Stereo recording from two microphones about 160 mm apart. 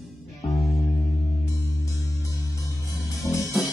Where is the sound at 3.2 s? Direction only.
20° left (ahead or behind).